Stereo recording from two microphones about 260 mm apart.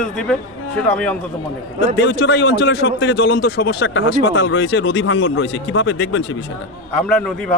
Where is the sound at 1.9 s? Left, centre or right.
Left.